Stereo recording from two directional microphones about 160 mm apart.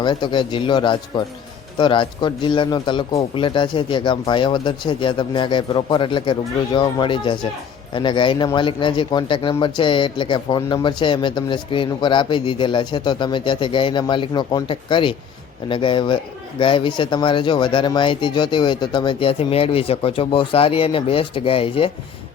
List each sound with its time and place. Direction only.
0.0 s a man's voice: 30° left (ahead or behind)